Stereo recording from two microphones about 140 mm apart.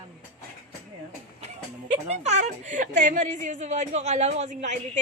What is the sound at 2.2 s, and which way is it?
Speech, 55° right (ahead or behind).